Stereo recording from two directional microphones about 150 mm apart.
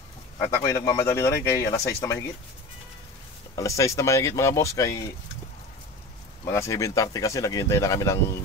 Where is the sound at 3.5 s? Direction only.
20° left (ahead or behind).